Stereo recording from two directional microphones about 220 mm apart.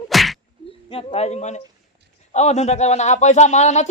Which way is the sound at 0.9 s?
25° left (ahead or behind).